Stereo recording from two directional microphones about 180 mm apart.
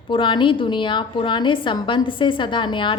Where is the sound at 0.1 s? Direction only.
25° left (ahead or behind).